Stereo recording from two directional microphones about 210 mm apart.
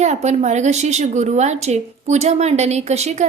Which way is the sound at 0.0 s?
30° right (ahead or behind).